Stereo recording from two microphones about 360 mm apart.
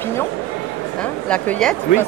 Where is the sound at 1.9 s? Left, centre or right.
Left.